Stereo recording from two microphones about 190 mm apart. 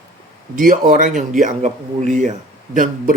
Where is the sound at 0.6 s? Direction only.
45° right (ahead or behind).